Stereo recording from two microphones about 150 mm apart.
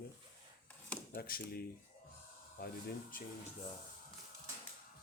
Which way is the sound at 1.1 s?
85° left.